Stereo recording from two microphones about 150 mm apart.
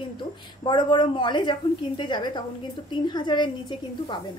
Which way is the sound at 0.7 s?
30° left (ahead or behind).